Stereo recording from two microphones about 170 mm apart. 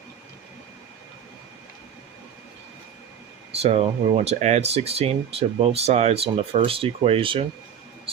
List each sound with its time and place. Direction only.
3.5 s speech: 35° right (ahead or behind)